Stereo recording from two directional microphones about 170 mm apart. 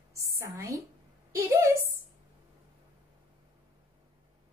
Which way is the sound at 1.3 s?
15° right (ahead or behind).